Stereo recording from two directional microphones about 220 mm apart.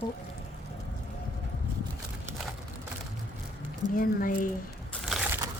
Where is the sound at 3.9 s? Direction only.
40° left (ahead or behind).